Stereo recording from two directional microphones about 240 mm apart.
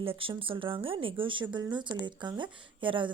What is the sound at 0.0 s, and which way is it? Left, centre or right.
Speech, right.